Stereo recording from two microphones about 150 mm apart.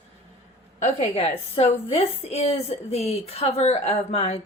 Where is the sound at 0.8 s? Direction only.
40° left (ahead or behind).